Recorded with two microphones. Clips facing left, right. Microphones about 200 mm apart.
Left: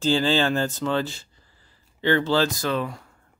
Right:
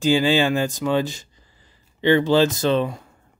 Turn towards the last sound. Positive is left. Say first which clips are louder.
# right 6 dB
turn(degrees=-20)  # may be behind; listen again after turning